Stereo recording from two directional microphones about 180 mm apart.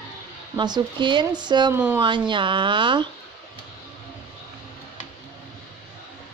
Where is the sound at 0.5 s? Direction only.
25° right (ahead or behind).